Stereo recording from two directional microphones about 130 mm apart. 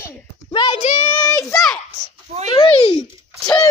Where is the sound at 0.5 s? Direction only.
40° left (ahead or behind).